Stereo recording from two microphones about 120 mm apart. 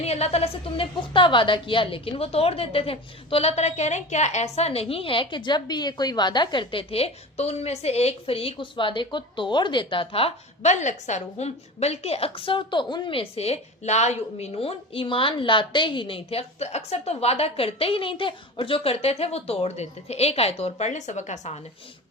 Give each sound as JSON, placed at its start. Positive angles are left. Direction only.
{"t": 0.0, "sound": "a woman's voice", "side_deg": 60}